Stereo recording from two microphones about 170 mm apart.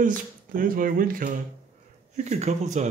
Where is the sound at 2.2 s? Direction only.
40° right (ahead or behind).